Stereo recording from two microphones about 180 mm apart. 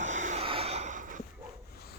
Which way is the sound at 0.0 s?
40° right (ahead or behind).